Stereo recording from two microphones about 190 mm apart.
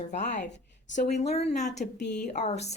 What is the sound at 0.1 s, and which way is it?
Speech, 40° left (ahead or behind).